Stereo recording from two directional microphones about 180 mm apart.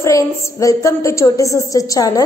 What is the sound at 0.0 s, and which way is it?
A woman's voice, 15° left (ahead or behind).